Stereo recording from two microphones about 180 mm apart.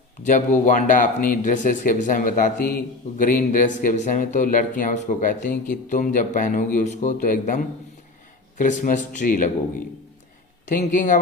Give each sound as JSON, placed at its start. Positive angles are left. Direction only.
{"t": 0.3, "sound": "speech", "side_deg": 45}
{"t": 10.7, "sound": "speech", "side_deg": 45}